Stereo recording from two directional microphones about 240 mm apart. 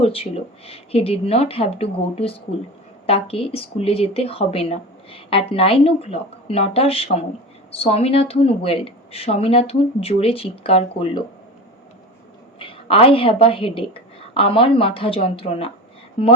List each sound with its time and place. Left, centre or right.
0.0 s speech: left
12.5 s speech: left